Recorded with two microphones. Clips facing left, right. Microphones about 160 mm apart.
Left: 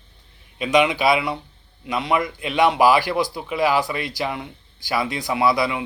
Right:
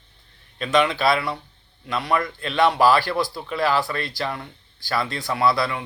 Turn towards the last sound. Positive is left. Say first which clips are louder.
# left 2 dB
turn(degrees=15)  # may be behind; listen again after turning